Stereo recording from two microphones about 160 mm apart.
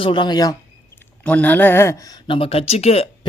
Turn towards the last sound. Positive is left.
turn(degrees=40)  # may be behind; listen again after turning